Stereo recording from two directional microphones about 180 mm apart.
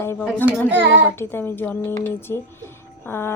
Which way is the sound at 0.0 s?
15° left (ahead or behind).